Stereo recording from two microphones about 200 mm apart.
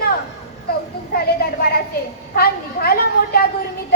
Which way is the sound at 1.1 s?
50° left (ahead or behind).